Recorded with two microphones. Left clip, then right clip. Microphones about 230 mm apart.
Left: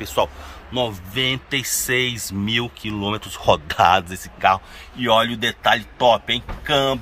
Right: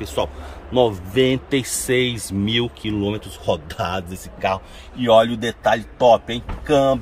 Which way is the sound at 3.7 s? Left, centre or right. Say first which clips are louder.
Left 10 dB; centre.